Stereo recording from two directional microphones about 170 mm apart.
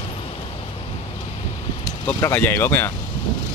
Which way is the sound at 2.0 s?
10° left (ahead or behind).